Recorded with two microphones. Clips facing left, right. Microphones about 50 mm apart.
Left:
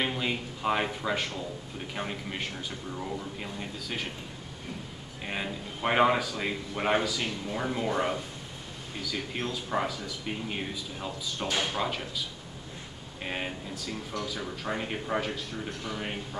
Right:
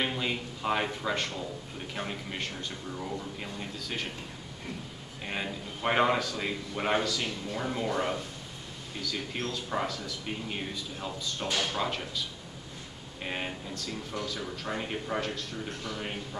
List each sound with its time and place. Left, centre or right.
0.0 s a man's voice: centre
5.2 s a man's voice: centre